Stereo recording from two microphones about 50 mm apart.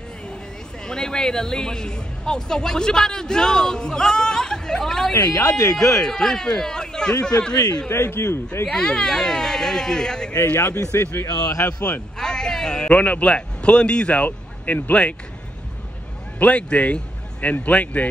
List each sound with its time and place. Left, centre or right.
0.8 s speech: centre
5.1 s speech: left
5.9 s speech: centre
7.9 s speech: left
8.7 s speech: centre
10.8 s speech: left
12.2 s a man's voice: centre; by 15.1 s left
16.4 s a man's voice: left